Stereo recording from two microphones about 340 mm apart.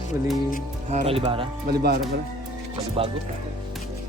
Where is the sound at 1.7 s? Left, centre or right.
Right.